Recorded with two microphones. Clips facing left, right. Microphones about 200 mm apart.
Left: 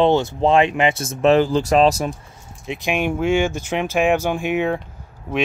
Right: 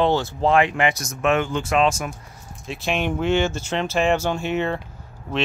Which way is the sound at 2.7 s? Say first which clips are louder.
Left 2 dB; 15° left (ahead or behind).